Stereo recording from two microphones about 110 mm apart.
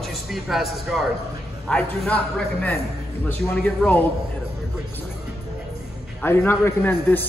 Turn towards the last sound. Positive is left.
turn(degrees=20)  # may be behind; listen again after turning